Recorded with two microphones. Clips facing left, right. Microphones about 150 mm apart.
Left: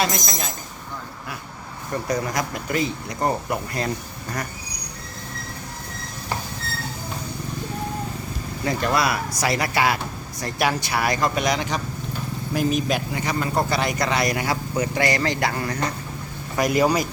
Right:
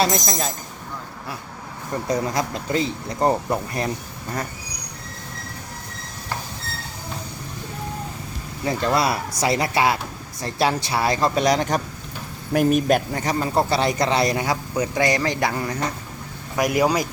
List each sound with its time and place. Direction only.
0.0 s speech: 35° right (ahead or behind)
2.0 s speech: 25° right (ahead or behind)
8.6 s speech: 25° right (ahead or behind); by 11.8 s 40° right (ahead or behind)
12.5 s speech: 55° right (ahead or behind)
13.2 s speech: 30° right (ahead or behind); by 17.0 s 10° right (ahead or behind)